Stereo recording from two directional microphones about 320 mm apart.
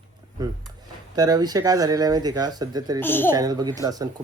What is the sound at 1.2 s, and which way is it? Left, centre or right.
Speech, centre.